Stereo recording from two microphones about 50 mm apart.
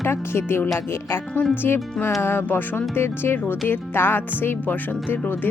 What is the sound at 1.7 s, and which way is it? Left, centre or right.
Speech, left.